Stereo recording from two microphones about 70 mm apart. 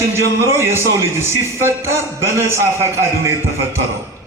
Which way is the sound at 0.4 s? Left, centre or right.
Right.